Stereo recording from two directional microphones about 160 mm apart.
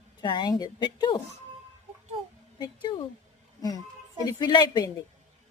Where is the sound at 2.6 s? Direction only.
30° left (ahead or behind).